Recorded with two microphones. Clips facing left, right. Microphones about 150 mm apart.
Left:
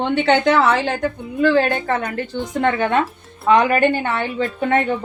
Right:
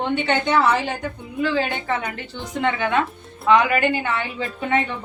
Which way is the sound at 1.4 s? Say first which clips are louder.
Left 6 dB; 60° left (ahead or behind).